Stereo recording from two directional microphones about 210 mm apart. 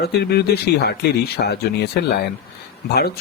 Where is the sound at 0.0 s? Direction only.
50° left (ahead or behind).